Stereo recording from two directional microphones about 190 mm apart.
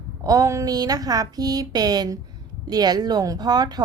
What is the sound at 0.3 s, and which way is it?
A woman's voice, 15° right (ahead or behind).